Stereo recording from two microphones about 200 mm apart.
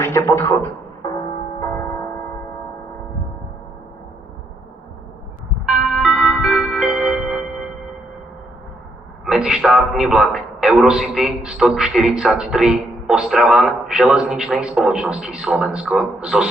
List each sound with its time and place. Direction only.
0.0 s a sound: 15° left (ahead or behind)
1.6 s music: 15° left (ahead or behind)
5.6 s music: centre (ahead or behind)
9.2 s a man's voice: 5° right (ahead or behind)